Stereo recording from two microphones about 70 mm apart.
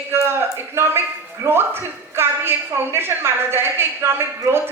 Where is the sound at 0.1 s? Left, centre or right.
Right.